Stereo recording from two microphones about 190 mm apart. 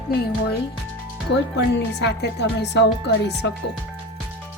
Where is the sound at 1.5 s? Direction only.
60° left (ahead or behind).